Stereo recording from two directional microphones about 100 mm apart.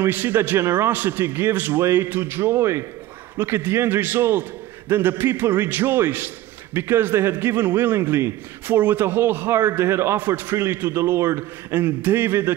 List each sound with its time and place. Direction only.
0.0 s a man's voice: 20° right (ahead or behind)